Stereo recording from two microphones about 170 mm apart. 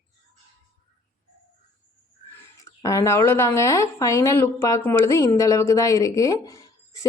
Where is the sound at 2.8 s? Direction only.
20° left (ahead or behind).